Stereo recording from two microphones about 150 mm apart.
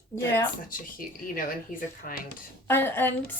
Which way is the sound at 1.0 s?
70° left (ahead or behind).